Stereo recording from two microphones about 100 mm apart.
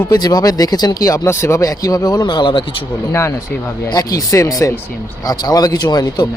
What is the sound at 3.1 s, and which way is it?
Speech, 30° left (ahead or behind).